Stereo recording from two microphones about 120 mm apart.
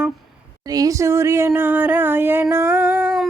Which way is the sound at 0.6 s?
30° right (ahead or behind).